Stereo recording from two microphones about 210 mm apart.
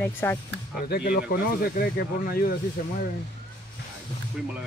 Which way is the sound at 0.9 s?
45° left (ahead or behind).